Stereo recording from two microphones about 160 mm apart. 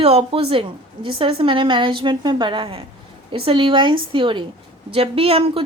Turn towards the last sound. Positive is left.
turn(degrees=-35)  # may be behind; listen again after turning